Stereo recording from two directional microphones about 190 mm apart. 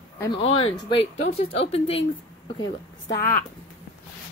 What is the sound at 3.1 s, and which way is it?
Speech, 10° left (ahead or behind).